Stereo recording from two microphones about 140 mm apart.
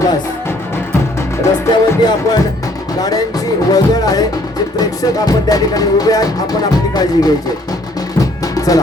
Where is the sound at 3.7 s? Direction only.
25° left (ahead or behind).